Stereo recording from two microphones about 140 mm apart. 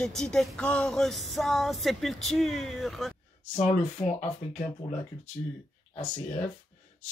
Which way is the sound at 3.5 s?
55° left (ahead or behind).